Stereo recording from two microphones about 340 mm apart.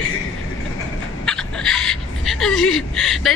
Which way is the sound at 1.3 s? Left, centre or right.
Centre.